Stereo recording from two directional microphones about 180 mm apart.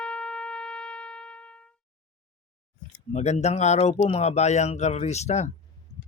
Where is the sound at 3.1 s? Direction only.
40° left (ahead or behind).